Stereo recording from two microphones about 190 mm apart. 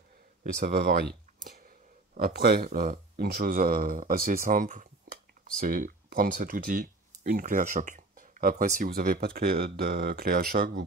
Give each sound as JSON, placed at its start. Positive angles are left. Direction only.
{"t": 0.4, "sound": "speech", "side_deg": -50}